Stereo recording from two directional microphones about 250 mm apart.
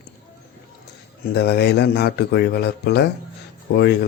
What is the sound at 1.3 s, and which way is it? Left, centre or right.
A man's voice, left.